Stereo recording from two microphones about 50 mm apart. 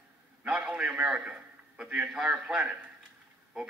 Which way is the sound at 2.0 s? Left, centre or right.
Centre.